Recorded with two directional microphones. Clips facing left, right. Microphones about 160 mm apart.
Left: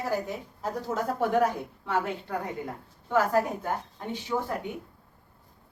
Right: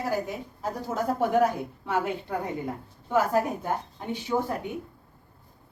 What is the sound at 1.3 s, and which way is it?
A woman's voice, 10° right (ahead or behind).